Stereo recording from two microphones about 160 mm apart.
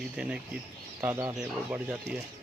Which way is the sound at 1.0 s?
15° right (ahead or behind).